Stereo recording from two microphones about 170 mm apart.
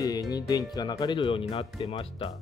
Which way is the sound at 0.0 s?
20° left (ahead or behind).